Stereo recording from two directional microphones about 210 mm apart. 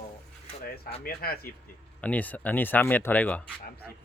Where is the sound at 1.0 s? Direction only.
45° left (ahead or behind).